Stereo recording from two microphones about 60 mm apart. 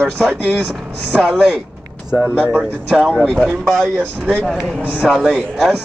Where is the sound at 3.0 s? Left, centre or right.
Centre.